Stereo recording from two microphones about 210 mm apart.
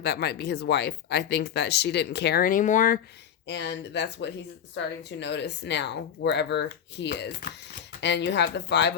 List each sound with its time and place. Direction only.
0.0 s speech: 50° left (ahead or behind)
3.4 s a woman's voice: 55° left (ahead or behind)